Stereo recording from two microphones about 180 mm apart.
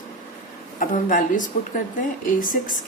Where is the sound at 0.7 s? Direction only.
50° left (ahead or behind).